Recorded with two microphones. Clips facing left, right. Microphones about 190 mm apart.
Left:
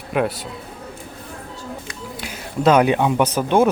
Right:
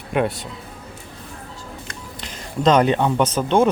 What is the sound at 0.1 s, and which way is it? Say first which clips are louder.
Speech: even; centre (ahead or behind).